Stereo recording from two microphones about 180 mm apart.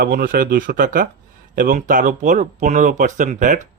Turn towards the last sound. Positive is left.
turn(degrees=-45)  # may be behind; listen again after turning